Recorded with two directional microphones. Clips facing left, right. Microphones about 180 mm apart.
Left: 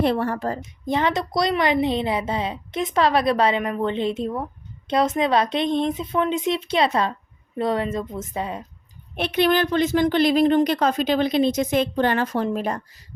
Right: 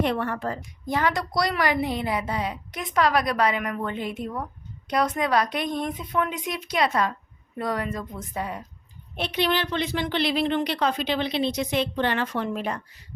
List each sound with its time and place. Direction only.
0.0 s a woman's voice: 35° left (ahead or behind)
0.6 s a woman's voice: 20° left (ahead or behind)
9.1 s a woman's voice: 55° left (ahead or behind); by 12.8 s 40° left (ahead or behind)